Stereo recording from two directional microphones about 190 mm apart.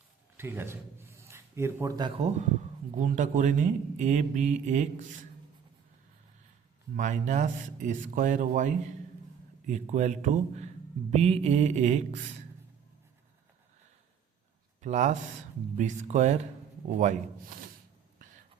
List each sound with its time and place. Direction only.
0.3 s a man's voice: 10° right (ahead or behind); by 5.0 s 40° right (ahead or behind)
6.9 s speech: 40° right (ahead or behind)
14.8 s speech: 40° right (ahead or behind)